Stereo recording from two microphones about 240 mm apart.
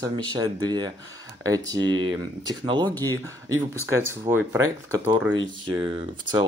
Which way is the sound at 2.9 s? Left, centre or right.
Centre.